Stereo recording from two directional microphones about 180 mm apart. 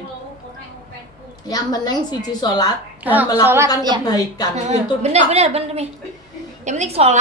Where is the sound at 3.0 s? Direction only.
10° right (ahead or behind).